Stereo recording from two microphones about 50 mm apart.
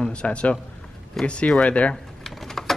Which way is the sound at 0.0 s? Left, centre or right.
Left.